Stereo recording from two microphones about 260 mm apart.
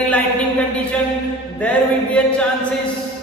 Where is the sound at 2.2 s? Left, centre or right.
Centre.